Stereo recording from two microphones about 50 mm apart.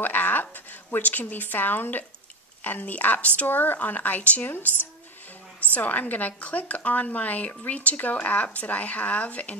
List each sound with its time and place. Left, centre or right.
0.0 s a woman's voice: left
3.4 s a woman's voice: left
5.7 s a woman's voice: left